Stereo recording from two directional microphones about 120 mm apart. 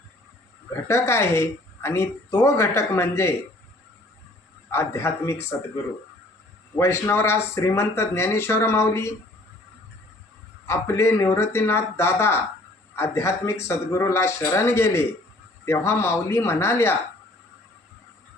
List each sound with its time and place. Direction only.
0.7 s a woman's voice: 20° left (ahead or behind)
4.7 s a woman's voice: 20° left (ahead or behind)
10.7 s a woman's voice: 20° left (ahead or behind)